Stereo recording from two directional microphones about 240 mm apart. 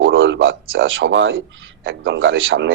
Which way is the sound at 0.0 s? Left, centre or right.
Right.